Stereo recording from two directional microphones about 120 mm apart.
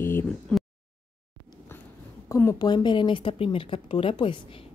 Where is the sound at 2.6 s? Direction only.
35° left (ahead or behind).